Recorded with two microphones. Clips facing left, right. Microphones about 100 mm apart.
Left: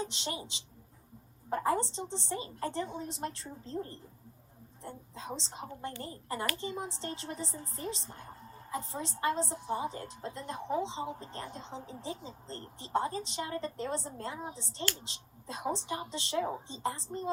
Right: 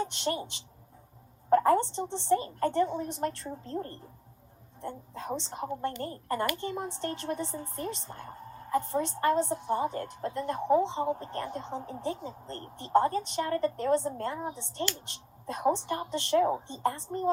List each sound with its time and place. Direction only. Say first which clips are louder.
0.0 s a woman's voice: right 6 dB; 55° right (ahead or behind)
1.6 s a woman's voice: right 6 dB; 55° right (ahead or behind)